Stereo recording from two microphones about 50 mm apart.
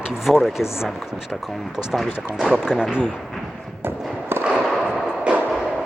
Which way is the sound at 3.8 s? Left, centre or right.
Right.